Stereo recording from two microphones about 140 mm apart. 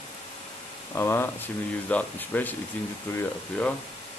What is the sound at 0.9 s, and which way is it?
Speech, 15° left (ahead or behind).